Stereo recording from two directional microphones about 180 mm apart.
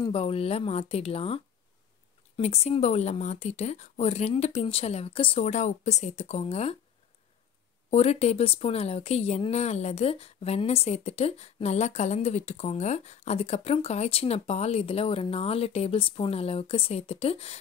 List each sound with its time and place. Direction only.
0.0 s speech: 30° left (ahead or behind)
7.9 s speech: 35° left (ahead or behind)